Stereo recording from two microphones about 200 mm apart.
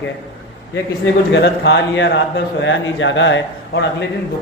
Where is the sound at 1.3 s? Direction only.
60° left (ahead or behind).